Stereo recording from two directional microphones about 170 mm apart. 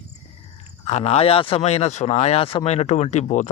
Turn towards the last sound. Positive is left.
turn(degrees=45)  # may be behind; listen again after turning